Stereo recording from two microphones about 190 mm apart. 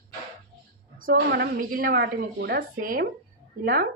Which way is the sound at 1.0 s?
55° right (ahead or behind).